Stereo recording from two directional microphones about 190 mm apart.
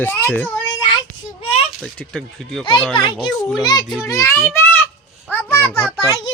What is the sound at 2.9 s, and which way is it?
A child's voice, 25° left (ahead or behind).